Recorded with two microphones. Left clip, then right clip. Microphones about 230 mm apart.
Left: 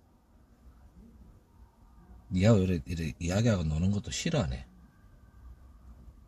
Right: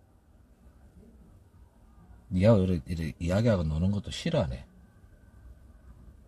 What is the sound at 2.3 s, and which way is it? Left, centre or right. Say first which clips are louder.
Speech: right 3 dB; centre.